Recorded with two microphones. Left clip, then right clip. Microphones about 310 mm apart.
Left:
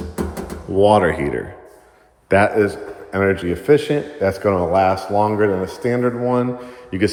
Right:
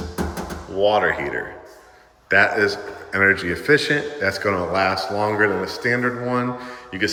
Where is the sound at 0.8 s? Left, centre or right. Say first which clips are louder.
Left 4 dB; centre.